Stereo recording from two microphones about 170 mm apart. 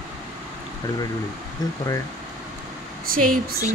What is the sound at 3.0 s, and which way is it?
Speech, 60° right (ahead or behind).